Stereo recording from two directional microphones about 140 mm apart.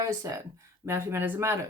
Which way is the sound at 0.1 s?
25° right (ahead or behind).